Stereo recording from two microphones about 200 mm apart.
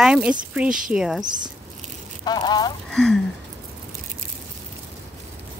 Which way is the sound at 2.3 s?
20° left (ahead or behind).